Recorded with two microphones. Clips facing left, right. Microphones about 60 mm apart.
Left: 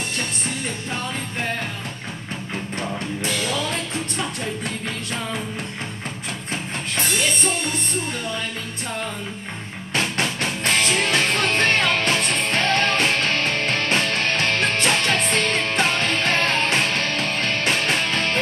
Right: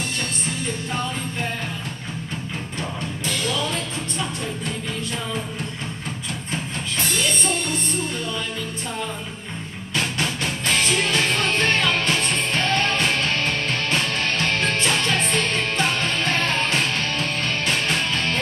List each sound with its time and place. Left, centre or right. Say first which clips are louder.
9.9 s music: left 1 dB; left